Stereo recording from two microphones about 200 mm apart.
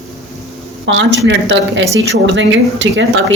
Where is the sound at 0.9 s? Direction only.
65° right (ahead or behind).